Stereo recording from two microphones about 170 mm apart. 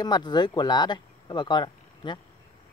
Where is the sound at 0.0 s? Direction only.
25° left (ahead or behind).